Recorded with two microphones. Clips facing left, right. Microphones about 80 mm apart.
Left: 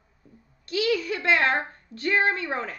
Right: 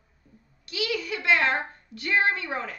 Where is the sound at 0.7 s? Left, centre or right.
Left.